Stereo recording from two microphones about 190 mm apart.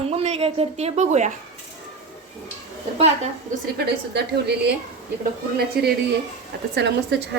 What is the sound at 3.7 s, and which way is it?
Speech, 60° right (ahead or behind).